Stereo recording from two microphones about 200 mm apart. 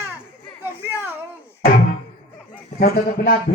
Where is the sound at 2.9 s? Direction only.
50° left (ahead or behind).